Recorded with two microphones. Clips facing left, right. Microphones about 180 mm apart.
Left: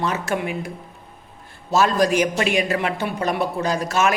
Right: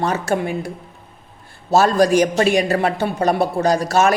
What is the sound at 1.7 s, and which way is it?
A woman's voice, 35° right (ahead or behind).